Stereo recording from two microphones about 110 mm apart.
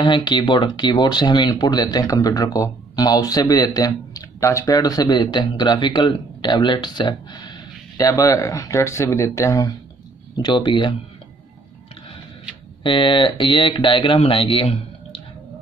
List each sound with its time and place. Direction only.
0.0 s speech: 45° left (ahead or behind); by 9.7 s 30° left (ahead or behind)
10.3 s speech: 45° left (ahead or behind)
12.8 s speech: 45° left (ahead or behind)